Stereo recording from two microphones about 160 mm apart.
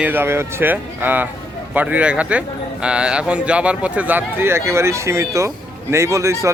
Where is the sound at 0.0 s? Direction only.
15° right (ahead or behind).